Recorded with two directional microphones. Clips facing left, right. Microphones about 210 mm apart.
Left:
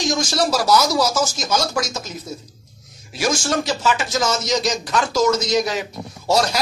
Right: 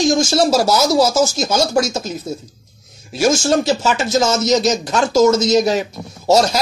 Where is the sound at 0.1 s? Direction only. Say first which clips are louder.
Right 6 dB; 25° right (ahead or behind).